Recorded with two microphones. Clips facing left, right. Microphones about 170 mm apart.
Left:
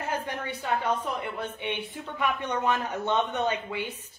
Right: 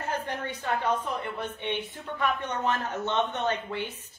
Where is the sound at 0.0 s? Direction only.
10° left (ahead or behind).